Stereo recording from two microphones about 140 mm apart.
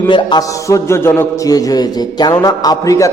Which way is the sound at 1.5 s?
25° left (ahead or behind).